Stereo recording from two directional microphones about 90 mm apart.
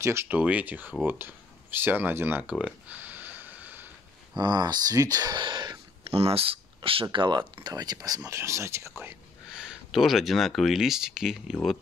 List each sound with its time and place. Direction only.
0.0 s speech: 30° right (ahead or behind)
0.4 s speech: 15° right (ahead or behind)
2.6 s a sound: 15° right (ahead or behind)
4.4 s speech: 50° right (ahead or behind)
5.4 s a sound: 55° right (ahead or behind)
6.0 s speech: 90° right; by 8.9 s 30° right (ahead or behind)
9.6 s speech: 5° right (ahead or behind)